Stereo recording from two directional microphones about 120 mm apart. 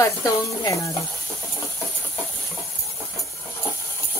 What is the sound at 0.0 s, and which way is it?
Speech, 25° left (ahead or behind).